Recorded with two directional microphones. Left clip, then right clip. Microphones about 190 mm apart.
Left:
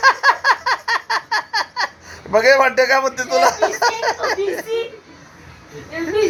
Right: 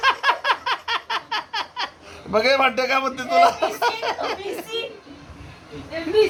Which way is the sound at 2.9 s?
20° left (ahead or behind).